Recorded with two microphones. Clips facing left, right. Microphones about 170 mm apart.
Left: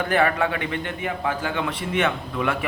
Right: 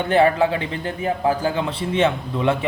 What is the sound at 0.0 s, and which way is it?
A man's voice, 30° right (ahead or behind).